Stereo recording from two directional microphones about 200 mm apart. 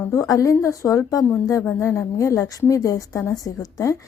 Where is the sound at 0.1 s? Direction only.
15° left (ahead or behind).